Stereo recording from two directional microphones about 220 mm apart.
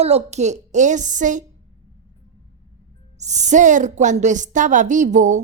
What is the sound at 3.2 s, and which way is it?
A woman's voice, 30° right (ahead or behind).